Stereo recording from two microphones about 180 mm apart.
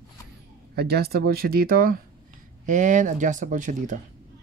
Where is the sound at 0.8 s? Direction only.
60° right (ahead or behind); by 4.0 s 45° right (ahead or behind).